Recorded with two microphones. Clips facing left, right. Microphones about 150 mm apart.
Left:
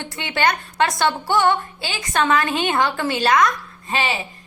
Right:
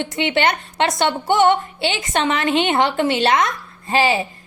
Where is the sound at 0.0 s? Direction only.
20° right (ahead or behind).